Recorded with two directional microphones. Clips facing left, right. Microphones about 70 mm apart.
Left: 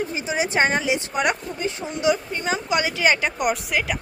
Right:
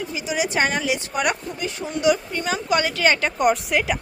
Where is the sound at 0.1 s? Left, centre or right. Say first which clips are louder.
Even; left.